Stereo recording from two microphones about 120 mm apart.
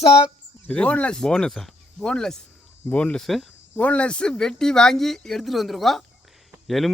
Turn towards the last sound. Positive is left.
turn(degrees=0)  # may be behind; listen again after turning